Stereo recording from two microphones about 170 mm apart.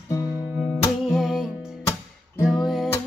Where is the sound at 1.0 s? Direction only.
Centre (ahead or behind).